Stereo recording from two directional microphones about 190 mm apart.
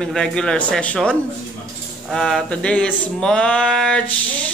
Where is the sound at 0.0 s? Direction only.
5° left (ahead or behind).